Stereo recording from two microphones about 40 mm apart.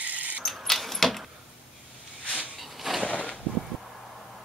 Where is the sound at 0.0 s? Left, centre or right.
Right.